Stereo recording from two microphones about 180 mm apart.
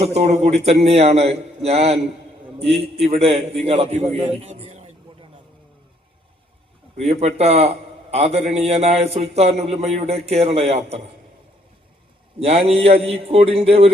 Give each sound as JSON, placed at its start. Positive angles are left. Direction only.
{"t": 0.0, "sound": "a man's voice", "side_deg": -35}
{"t": 7.1, "sound": "a man's voice", "side_deg": -35}
{"t": 12.4, "sound": "a man's voice", "side_deg": -35}